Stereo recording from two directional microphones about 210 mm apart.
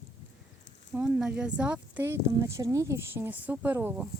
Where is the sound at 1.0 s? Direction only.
5° right (ahead or behind).